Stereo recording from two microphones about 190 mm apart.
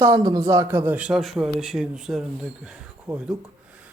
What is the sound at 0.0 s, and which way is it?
A man's voice, 20° right (ahead or behind).